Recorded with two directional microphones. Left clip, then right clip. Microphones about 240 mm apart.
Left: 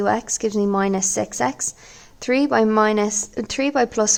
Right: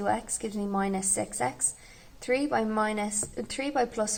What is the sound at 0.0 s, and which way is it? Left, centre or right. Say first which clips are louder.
A woman's voice: left 9 dB; left.